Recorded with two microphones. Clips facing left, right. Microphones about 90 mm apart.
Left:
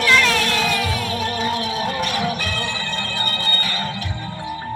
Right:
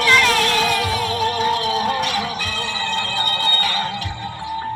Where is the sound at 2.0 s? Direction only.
55° left (ahead or behind).